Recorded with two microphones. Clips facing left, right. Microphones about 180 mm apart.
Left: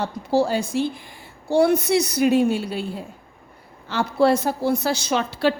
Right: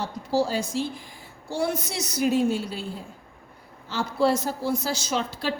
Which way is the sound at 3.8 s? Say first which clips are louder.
Left 5 dB; 65° left (ahead or behind).